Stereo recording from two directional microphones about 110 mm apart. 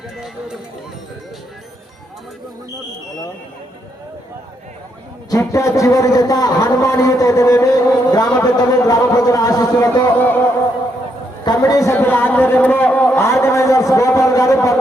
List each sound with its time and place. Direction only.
5.3 s speech: 30° left (ahead or behind)
10.2 s music: 15° left (ahead or behind)
11.4 s a man's voice: 30° left (ahead or behind)
11.9 s speech: 15° left (ahead or behind)
13.4 s speech: 25° left (ahead or behind)